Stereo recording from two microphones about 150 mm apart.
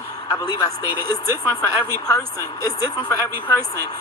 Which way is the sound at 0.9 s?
25° left (ahead or behind).